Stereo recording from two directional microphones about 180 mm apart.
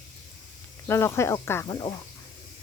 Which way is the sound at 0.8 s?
15° left (ahead or behind).